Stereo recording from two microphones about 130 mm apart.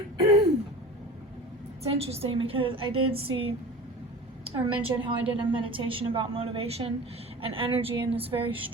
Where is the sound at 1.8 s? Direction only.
50° right (ahead or behind).